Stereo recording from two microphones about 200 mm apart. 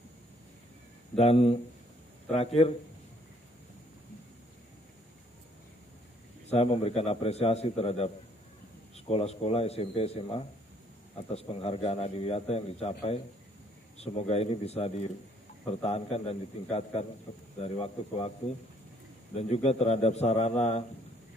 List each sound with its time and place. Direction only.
1.1 s a man's voice: 30° left (ahead or behind)
6.5 s a man's voice: 30° left (ahead or behind)
13.9 s a man's voice: 30° left (ahead or behind)
19.3 s a man's voice: 30° left (ahead or behind)